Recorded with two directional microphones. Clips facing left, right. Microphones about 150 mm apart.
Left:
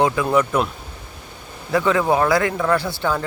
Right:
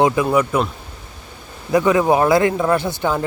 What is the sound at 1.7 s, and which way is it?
Speech, 15° right (ahead or behind).